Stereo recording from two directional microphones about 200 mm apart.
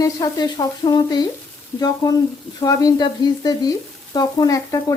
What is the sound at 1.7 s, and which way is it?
Frying, 20° left (ahead or behind).